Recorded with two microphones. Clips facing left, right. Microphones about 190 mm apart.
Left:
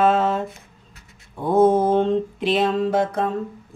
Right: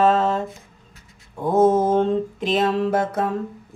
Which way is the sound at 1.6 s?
40° right (ahead or behind).